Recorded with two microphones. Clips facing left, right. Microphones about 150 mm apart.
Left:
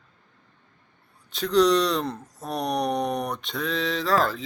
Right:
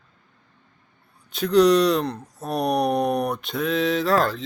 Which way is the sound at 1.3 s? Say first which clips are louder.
Right 3 dB; centre (ahead or behind).